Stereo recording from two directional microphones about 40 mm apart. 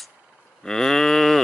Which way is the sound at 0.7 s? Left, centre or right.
Centre.